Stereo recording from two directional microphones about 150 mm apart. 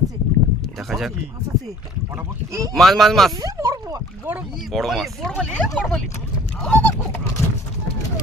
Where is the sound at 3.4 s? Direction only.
25° right (ahead or behind).